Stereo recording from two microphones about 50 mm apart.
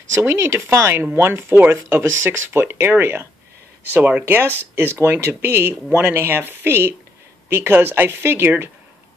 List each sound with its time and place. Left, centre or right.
0.3 s speech: right
1.1 s speech: right
4.3 s speech: right